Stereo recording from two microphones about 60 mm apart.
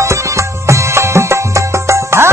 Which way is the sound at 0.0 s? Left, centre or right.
Right.